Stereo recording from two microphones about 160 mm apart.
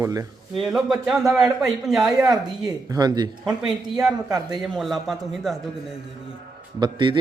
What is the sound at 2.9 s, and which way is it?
Speech, 25° right (ahead or behind).